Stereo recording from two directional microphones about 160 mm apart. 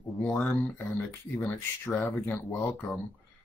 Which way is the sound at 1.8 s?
10° left (ahead or behind).